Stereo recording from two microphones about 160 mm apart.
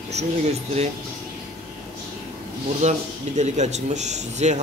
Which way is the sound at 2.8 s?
45° right (ahead or behind).